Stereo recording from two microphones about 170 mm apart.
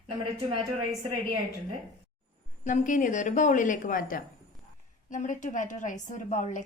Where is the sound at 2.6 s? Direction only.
50° left (ahead or behind).